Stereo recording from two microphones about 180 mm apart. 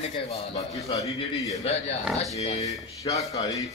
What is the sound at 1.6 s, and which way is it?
Speech, 35° left (ahead or behind).